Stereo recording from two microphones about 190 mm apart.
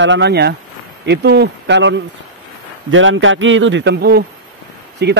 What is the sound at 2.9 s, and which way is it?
A man's voice, 90° right.